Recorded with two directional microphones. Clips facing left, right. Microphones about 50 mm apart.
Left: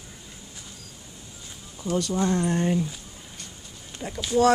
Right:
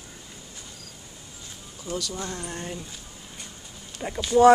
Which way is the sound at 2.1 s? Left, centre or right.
Left.